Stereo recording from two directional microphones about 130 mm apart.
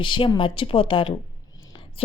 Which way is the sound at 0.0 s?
40° left (ahead or behind).